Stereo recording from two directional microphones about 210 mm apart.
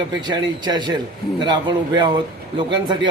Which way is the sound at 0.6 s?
20° right (ahead or behind).